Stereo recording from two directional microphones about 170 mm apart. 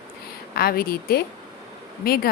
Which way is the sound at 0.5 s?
65° left (ahead or behind).